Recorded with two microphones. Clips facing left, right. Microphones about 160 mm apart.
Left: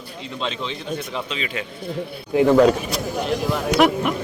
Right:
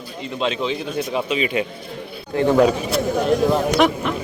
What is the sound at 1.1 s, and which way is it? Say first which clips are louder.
Speech: right 7 dB; 15° right (ahead or behind).